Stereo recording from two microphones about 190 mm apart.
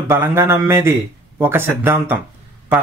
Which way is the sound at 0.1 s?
15° right (ahead or behind).